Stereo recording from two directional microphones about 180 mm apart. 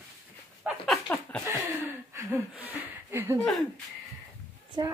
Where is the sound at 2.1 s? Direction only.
10° right (ahead or behind).